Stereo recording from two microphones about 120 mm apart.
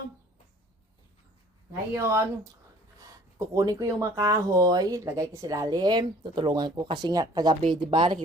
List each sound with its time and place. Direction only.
2.0 s speech: 25° right (ahead or behind)
7.6 s speech: 40° right (ahead or behind)